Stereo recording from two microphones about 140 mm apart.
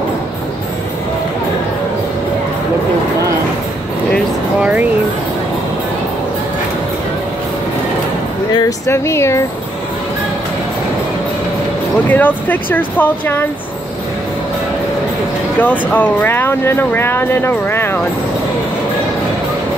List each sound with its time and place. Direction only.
4.6 s a sound: 10° right (ahead or behind)
8.5 s speech: 20° left (ahead or behind)
12.1 s speech: 10° left (ahead or behind)
15.6 s speech: 15° left (ahead or behind)